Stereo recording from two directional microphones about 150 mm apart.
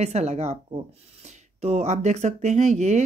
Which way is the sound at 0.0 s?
50° right (ahead or behind).